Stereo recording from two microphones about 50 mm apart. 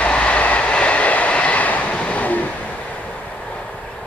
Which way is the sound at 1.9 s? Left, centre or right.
Left.